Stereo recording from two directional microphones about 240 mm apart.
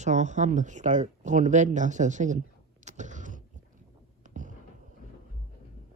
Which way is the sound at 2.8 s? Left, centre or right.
Right.